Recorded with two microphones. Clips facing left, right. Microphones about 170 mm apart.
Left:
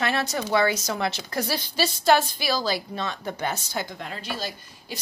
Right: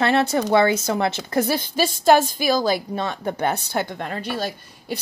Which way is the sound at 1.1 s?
50° right (ahead or behind).